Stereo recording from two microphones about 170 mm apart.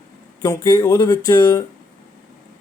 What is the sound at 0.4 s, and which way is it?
Speech, 20° left (ahead or behind).